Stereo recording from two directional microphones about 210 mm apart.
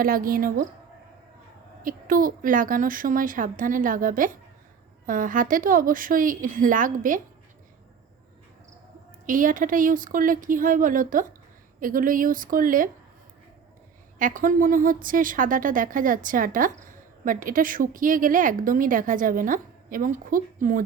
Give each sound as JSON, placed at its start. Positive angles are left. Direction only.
{"t": 0.0, "sound": "a woman's voice", "side_deg": -40}
{"t": 1.8, "sound": "a woman's voice", "side_deg": -40}
{"t": 9.2, "sound": "a woman's voice", "side_deg": -40}
{"t": 14.2, "sound": "a woman's voice", "side_deg": -40}